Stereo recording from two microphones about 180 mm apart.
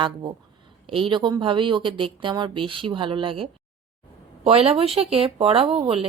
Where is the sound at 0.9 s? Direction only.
30° right (ahead or behind).